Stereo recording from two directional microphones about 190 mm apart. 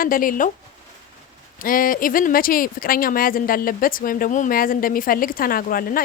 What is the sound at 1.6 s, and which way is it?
Speech, 45° left (ahead or behind).